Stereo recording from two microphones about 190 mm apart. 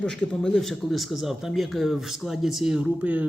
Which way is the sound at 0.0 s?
5° left (ahead or behind).